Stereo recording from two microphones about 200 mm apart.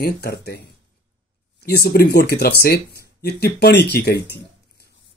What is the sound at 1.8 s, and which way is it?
Speech, 50° left (ahead or behind).